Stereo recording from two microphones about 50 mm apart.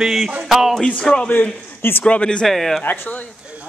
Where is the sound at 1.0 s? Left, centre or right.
Centre.